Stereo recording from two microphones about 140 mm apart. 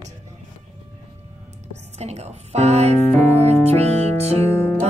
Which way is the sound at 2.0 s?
50° right (ahead or behind).